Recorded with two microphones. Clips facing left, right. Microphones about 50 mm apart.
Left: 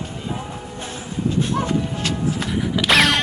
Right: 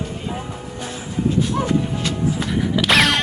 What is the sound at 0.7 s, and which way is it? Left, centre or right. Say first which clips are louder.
Train: right 3 dB; left.